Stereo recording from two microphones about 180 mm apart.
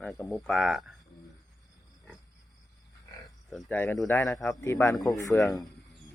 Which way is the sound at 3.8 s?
15° left (ahead or behind).